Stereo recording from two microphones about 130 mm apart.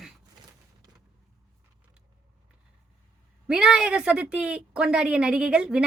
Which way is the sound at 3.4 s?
5° right (ahead or behind).